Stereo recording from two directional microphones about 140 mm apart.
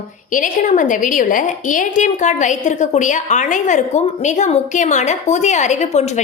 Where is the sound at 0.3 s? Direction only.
70° left (ahead or behind).